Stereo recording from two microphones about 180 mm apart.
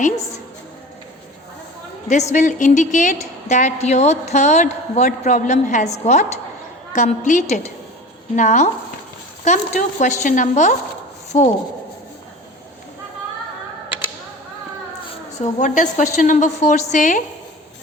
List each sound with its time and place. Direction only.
2.0 s a woman's voice: 40° left (ahead or behind)
15.4 s a woman's voice: 40° left (ahead or behind)